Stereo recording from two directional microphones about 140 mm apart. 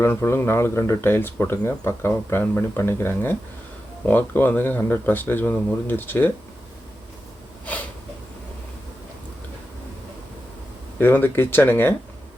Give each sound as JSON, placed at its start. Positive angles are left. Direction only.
{"t": 0.0, "sound": "speech", "side_deg": 15}
{"t": 11.0, "sound": "speech", "side_deg": 15}